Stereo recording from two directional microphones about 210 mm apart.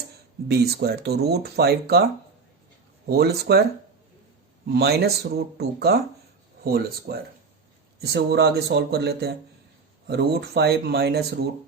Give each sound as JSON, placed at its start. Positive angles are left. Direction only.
{"t": 0.4, "sound": "speech", "side_deg": -50}
{"t": 3.1, "sound": "speech", "side_deg": -50}
{"t": 4.6, "sound": "speech", "side_deg": -50}